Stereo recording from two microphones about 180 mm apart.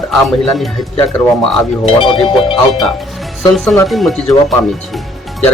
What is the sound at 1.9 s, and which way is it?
Speech, 30° left (ahead or behind).